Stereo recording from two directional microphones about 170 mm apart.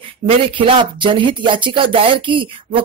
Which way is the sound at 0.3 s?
30° right (ahead or behind).